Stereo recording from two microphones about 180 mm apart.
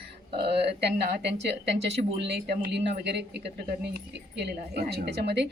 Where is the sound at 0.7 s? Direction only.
65° right (ahead or behind).